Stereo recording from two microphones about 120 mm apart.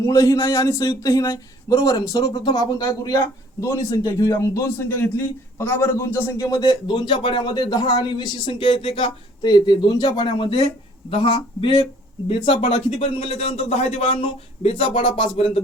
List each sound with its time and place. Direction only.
0.0 s speech: 25° left (ahead or behind); by 15.6 s 50° left (ahead or behind)